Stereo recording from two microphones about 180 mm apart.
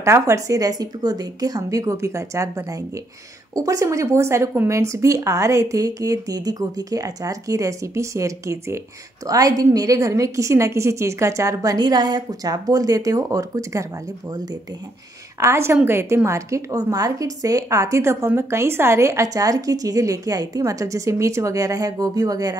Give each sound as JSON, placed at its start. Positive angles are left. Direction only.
{"t": 0.0, "sound": "a woman's voice", "side_deg": -15}
{"t": 15.4, "sound": "speech", "side_deg": -15}